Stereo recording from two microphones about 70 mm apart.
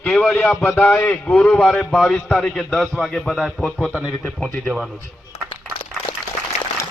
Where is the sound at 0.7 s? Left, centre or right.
Left.